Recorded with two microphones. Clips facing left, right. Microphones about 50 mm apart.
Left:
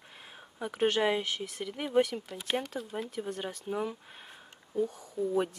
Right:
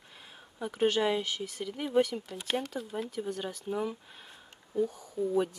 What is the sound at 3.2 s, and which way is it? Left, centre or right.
Speech, centre.